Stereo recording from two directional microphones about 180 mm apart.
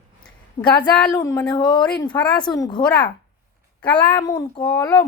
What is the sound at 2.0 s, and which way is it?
Speech, 5° left (ahead or behind).